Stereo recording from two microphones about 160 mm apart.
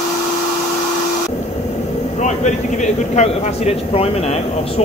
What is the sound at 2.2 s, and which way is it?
Speech, 50° left (ahead or behind).